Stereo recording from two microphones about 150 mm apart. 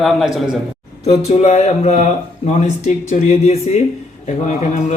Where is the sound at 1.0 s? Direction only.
45° left (ahead or behind).